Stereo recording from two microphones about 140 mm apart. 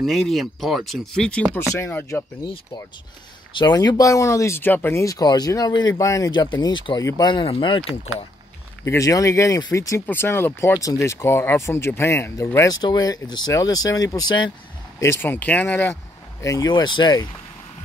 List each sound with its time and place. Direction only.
0.0 s speech: centre (ahead or behind)
3.5 s speech: 30° left (ahead or behind)
8.8 s speech: 25° left (ahead or behind)
15.0 s speech: 15° left (ahead or behind)
16.4 s speech: 25° left (ahead or behind)